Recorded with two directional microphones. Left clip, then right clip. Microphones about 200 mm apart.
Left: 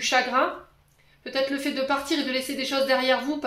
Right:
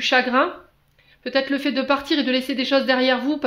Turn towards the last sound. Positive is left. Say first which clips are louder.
# right 3 dB
turn(degrees=-50)  # may be behind; listen again after turning